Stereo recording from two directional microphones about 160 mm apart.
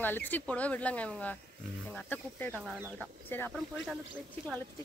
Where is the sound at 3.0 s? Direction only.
15° left (ahead or behind).